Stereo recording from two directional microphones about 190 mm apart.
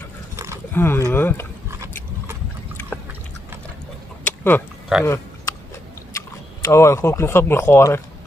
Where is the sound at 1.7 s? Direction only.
15° right (ahead or behind).